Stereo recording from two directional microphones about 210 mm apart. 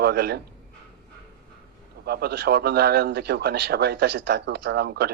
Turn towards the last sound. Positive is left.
turn(degrees=-50)  # may be behind; listen again after turning